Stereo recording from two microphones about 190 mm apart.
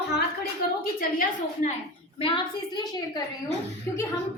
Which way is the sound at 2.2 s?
25° left (ahead or behind).